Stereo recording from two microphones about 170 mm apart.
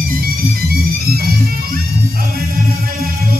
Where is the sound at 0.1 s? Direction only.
60° right (ahead or behind).